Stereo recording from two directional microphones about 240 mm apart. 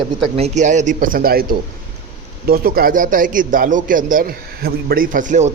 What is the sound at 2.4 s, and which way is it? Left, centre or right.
A man's voice, right.